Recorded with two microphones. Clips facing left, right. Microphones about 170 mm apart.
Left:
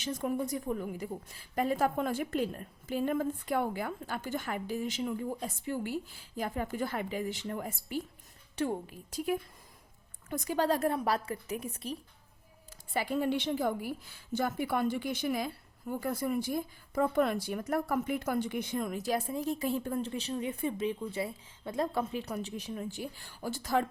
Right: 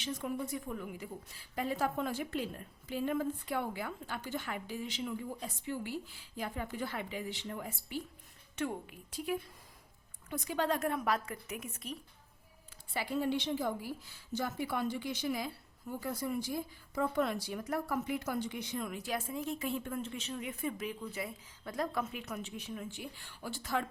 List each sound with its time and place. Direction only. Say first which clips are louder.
0.0 s a woman's voice: left 5 dB; 45° left (ahead or behind)
8.5 s speech: left 4 dB; 35° left (ahead or behind)
12.9 s a woman's voice: left 3 dB; 55° left (ahead or behind)